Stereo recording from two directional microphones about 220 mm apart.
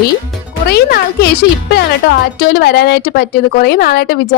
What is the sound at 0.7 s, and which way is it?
A woman's voice, 45° left (ahead or behind).